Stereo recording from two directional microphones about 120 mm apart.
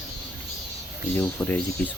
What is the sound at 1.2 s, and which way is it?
Speech, 15° left (ahead or behind).